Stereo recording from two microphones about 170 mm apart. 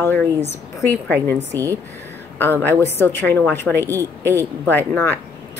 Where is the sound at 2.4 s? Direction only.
10° left (ahead or behind).